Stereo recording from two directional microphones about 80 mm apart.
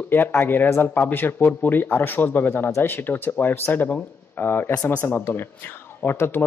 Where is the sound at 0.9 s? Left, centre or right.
Left.